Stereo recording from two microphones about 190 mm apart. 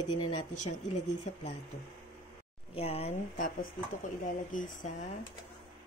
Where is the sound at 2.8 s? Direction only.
30° left (ahead or behind).